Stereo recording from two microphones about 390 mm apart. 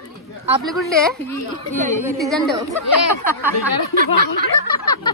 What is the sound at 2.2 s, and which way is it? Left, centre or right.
Speech, centre.